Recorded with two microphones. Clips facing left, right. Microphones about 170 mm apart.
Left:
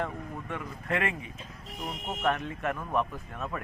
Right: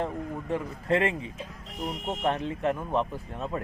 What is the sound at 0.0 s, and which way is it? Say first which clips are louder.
Speech: right 3 dB; 30° right (ahead or behind).